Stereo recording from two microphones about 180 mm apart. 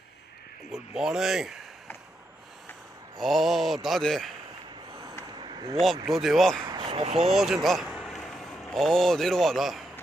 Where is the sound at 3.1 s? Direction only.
Centre (ahead or behind).